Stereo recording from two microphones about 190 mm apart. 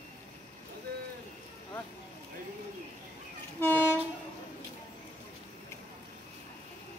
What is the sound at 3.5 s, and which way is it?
Train, 10° left (ahead or behind).